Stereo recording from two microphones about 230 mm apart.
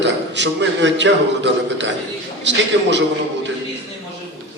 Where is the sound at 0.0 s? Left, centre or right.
Right.